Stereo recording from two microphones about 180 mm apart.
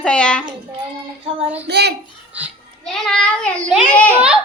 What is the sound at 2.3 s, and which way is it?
Child singing, 5° right (ahead or behind).